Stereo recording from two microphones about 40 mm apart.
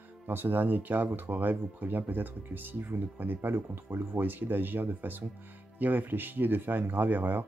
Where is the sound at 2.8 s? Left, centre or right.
Right.